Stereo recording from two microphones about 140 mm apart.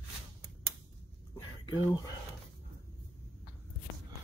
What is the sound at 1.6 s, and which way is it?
Speech, 30° left (ahead or behind).